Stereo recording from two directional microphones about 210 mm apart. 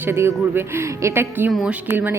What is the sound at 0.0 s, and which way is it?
A woman's voice, 10° right (ahead or behind).